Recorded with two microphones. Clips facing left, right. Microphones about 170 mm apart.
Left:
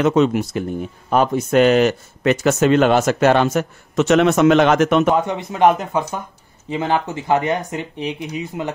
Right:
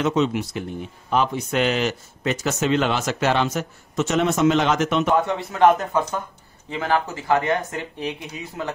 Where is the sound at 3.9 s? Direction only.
70° left (ahead or behind); by 5.1 s 55° left (ahead or behind).